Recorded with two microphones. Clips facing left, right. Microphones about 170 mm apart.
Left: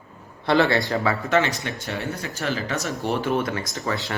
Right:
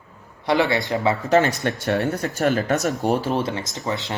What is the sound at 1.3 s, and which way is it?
Speech, 45° right (ahead or behind).